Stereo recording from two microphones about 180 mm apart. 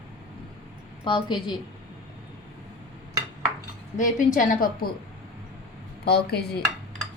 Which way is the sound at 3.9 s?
45° left (ahead or behind).